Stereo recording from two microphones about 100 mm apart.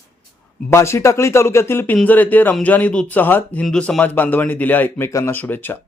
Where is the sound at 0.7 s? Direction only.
25° left (ahead or behind).